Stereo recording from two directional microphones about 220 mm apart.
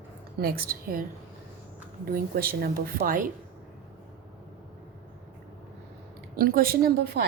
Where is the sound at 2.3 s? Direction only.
40° right (ahead or behind).